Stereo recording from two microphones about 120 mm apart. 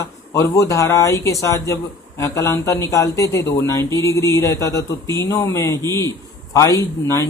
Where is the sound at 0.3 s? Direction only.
25° left (ahead or behind).